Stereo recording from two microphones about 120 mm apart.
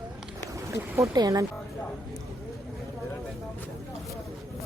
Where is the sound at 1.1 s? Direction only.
30° right (ahead or behind).